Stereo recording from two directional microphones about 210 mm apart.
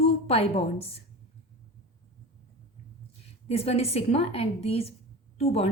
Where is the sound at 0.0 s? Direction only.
25° left (ahead or behind).